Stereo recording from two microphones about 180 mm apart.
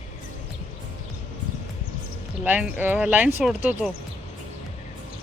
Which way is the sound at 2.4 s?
10° right (ahead or behind).